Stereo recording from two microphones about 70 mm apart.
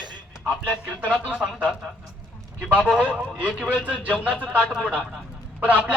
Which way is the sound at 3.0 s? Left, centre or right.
Centre.